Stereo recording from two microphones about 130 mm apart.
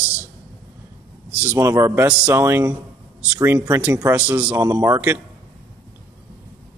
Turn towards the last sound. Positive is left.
turn(degrees=-20)  # may be behind; listen again after turning